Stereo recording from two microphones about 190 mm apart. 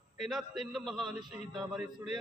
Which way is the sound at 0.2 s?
Centre (ahead or behind).